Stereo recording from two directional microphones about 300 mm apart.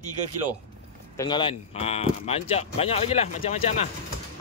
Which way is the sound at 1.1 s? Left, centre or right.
Centre.